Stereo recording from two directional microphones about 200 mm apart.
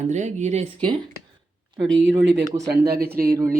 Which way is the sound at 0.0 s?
35° right (ahead or behind).